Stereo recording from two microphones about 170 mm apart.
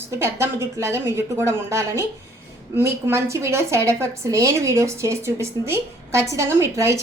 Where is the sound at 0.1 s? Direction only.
15° right (ahead or behind).